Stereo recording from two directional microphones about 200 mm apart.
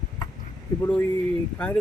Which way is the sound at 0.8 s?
10° left (ahead or behind).